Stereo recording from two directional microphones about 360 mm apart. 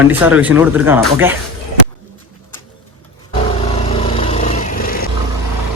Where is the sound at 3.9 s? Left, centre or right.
Centre.